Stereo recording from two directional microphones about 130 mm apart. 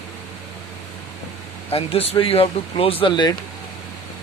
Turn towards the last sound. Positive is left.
turn(degrees=35)  # may be behind; listen again after turning